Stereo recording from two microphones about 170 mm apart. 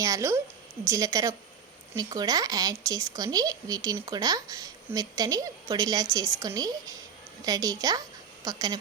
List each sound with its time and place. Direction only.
0.0 s a woman's voice: 15° right (ahead or behind)